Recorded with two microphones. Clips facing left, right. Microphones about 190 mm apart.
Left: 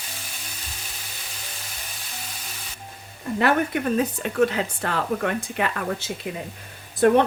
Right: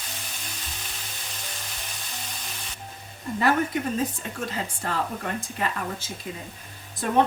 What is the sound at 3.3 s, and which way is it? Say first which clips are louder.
Speech: left 2 dB; 65° left (ahead or behind).